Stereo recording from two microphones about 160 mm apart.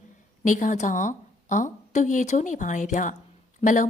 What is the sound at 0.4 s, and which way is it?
A woman's voice, 55° left (ahead or behind).